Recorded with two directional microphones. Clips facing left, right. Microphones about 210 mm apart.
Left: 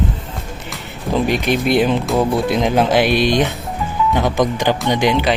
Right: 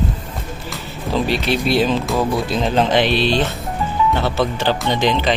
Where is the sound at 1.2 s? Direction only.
15° left (ahead or behind).